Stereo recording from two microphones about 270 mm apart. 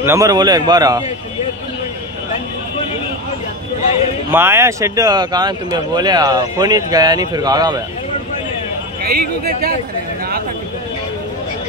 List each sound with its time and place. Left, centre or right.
0.0 s speech: centre
4.3 s speech: centre
9.0 s speech: right